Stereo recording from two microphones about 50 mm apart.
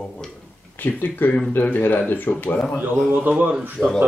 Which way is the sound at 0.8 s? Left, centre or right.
Left.